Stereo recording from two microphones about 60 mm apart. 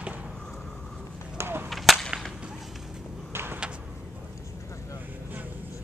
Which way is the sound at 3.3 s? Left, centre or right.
Right.